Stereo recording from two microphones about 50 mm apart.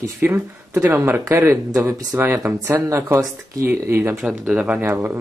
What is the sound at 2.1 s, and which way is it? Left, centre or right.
Speech, right.